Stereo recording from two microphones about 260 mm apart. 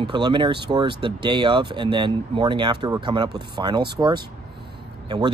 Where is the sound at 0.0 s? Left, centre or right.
Centre.